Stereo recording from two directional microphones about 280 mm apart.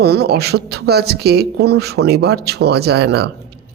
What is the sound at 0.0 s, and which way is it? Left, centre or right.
Speech, right.